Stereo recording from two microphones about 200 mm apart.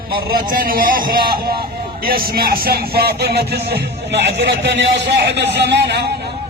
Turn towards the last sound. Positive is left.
turn(degrees=-55)  # may be behind; listen again after turning